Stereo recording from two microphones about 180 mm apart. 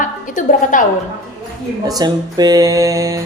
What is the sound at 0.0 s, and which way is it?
Speech, 45° left (ahead or behind).